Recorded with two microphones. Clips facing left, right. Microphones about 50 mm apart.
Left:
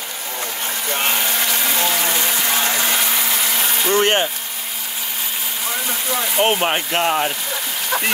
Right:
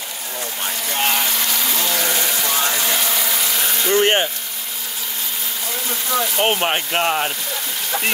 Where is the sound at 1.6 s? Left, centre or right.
Left.